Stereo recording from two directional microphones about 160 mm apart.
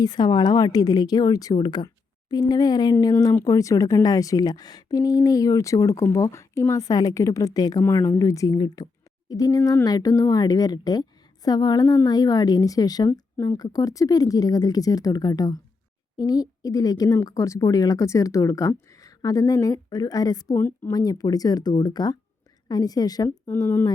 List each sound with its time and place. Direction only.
0.0 s speech: 25° left (ahead or behind)
20.6 s a woman's voice: 15° left (ahead or behind)
20.9 s speech: 25° left (ahead or behind)
23.6 s a woman's voice: 10° left (ahead or behind)